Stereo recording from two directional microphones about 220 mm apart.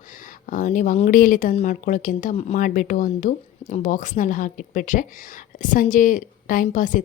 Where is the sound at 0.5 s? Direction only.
35° left (ahead or behind).